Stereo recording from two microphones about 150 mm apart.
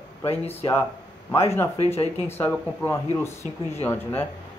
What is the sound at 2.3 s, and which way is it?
Speech, 15° left (ahead or behind).